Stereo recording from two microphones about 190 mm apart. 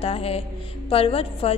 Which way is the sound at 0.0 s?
30° left (ahead or behind).